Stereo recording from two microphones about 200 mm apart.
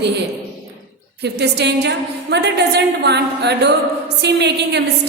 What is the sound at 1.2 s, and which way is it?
A woman's voice, 55° right (ahead or behind).